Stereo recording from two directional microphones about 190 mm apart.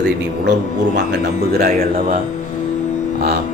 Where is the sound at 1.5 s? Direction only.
50° right (ahead or behind).